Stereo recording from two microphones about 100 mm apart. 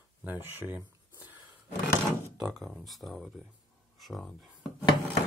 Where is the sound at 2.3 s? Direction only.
5° right (ahead or behind).